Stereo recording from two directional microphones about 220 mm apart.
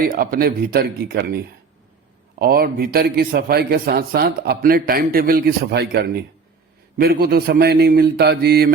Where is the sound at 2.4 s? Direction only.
45° right (ahead or behind).